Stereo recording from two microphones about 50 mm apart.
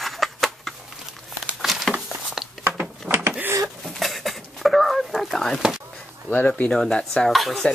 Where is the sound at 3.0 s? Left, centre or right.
Right.